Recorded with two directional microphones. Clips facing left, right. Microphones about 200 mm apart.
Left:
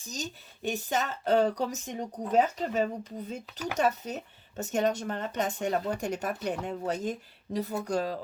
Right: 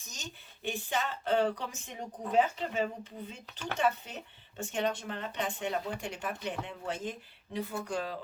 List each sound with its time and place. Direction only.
0.0 s speech: 35° left (ahead or behind)